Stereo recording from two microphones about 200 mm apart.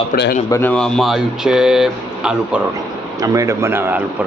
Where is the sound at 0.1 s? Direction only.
40° left (ahead or behind).